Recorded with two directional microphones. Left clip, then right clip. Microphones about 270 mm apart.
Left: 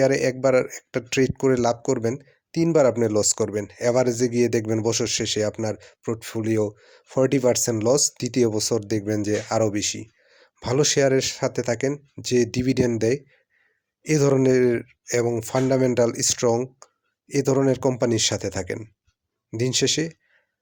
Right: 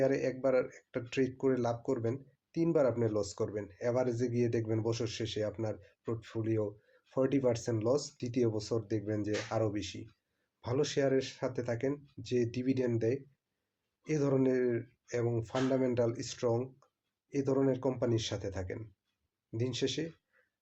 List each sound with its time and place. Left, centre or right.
0.0 s speech: left